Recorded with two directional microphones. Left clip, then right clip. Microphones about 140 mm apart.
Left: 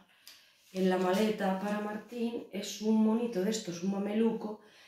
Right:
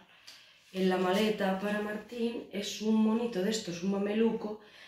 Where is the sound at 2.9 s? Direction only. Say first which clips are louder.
Left 1 dB; centre (ahead or behind).